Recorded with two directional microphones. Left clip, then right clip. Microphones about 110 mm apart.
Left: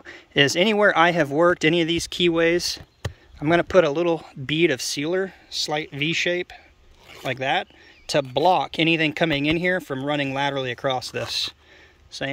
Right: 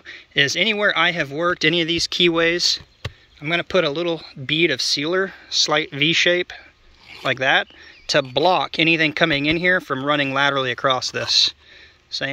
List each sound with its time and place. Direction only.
0.0 s speech: 45° left (ahead or behind)
1.6 s speech: 30° left (ahead or behind)
2.4 s speech: 45° left (ahead or behind)
3.3 s speech: 55° left (ahead or behind); by 12.3 s 30° left (ahead or behind)